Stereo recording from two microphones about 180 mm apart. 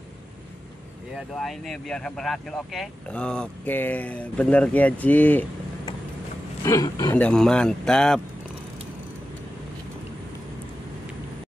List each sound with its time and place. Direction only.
1.1 s speech: centre (ahead or behind)
6.6 s speech: 20° left (ahead or behind)
7.2 s speech: 5° left (ahead or behind)